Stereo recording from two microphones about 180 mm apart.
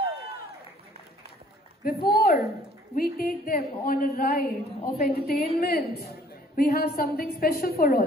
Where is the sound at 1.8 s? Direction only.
60° left (ahead or behind).